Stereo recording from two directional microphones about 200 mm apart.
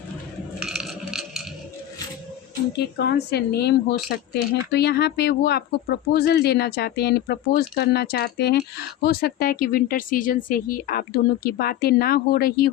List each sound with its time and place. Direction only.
0.6 s coin: centre (ahead or behind)
2.7 s speech: 55° left (ahead or behind)